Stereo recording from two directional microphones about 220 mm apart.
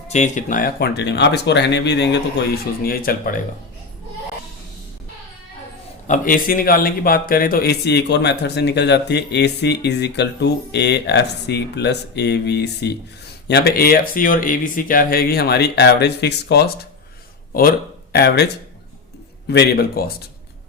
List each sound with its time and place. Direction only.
0.1 s speech: 35° left (ahead or behind)
6.1 s speech: 40° left (ahead or behind)